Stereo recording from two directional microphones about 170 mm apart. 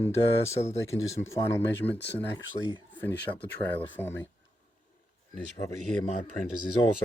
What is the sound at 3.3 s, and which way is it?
Speech, 10° left (ahead or behind).